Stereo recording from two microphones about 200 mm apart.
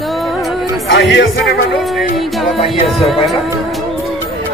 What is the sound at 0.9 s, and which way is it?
Speech, 65° left (ahead or behind).